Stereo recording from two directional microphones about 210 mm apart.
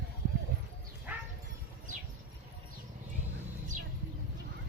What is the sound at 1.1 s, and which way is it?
Bow-wow, 10° right (ahead or behind).